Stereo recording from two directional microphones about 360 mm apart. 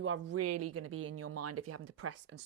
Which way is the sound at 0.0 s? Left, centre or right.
Right.